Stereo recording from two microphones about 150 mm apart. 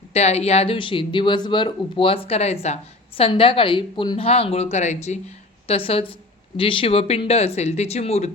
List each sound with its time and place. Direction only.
0.1 s speech: 45° left (ahead or behind)